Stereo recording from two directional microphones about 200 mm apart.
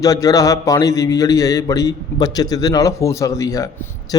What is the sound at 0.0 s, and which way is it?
Speech, 15° left (ahead or behind).